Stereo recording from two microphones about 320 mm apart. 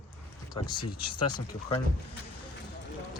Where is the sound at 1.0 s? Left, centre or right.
Left.